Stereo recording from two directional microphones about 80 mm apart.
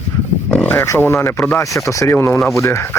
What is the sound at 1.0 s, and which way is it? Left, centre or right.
Speech, left.